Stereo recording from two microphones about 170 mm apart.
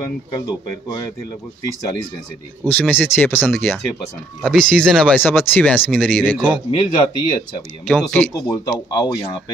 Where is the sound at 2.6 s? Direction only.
10° left (ahead or behind).